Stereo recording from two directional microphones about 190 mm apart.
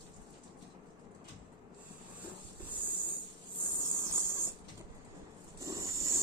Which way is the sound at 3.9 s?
15° right (ahead or behind).